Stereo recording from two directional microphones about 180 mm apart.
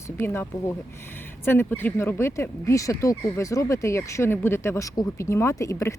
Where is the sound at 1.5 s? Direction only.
10° left (ahead or behind).